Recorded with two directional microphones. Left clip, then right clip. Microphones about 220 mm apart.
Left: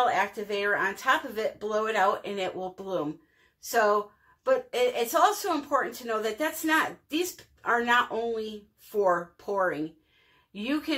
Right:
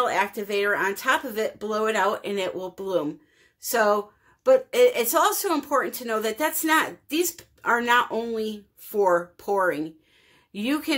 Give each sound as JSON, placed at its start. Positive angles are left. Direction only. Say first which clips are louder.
{"t": 0.0, "sound": "a woman's voice", "louder": "right 2 dB", "side_deg": -50}
{"t": 4.5, "sound": "a woman's voice", "louder": "right 7 dB", "side_deg": -50}